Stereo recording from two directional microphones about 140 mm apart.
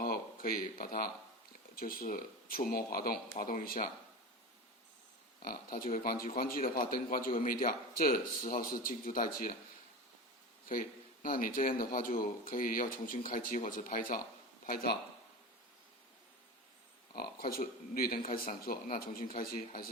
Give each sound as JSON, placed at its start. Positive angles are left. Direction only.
{"t": 0.0, "sound": "a sound", "side_deg": 90}
{"t": 1.7, "sound": "a man's voice", "side_deg": 90}
{"t": 5.4, "sound": "a man's voice", "side_deg": 90}
{"t": 10.7, "sound": "speech", "side_deg": 90}
{"t": 17.2, "sound": "a man's voice", "side_deg": 90}